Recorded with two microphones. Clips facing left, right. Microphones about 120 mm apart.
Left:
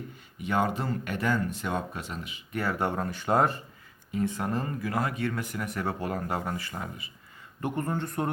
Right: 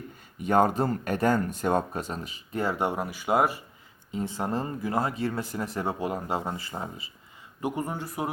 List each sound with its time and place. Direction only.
0.4 s speech: 45° right (ahead or behind)
2.6 s speech: 20° right (ahead or behind)
4.1 s speech: 25° right (ahead or behind)
5.9 s speech: 15° right (ahead or behind)
7.6 s speech: 10° right (ahead or behind)